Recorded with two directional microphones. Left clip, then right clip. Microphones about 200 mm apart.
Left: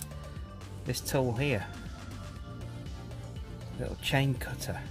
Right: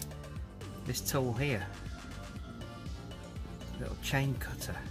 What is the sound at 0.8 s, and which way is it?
Speech, 5° left (ahead or behind).